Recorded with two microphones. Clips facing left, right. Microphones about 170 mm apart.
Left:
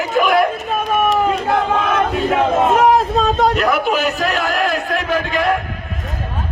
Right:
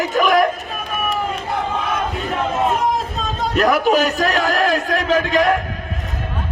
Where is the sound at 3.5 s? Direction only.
40° right (ahead or behind).